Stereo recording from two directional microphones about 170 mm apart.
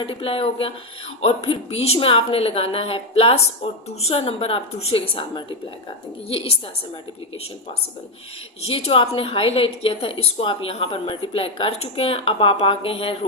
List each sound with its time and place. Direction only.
0.0 s a woman's voice: 35° left (ahead or behind)
8.6 s a woman's voice: 30° left (ahead or behind)